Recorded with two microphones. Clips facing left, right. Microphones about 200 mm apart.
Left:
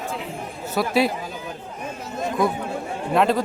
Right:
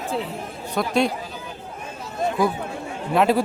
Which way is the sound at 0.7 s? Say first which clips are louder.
Left 1 dB; 5° left (ahead or behind).